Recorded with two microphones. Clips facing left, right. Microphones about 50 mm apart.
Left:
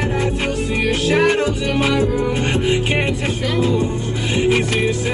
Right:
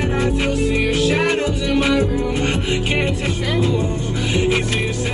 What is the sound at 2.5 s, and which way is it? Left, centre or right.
Music, left.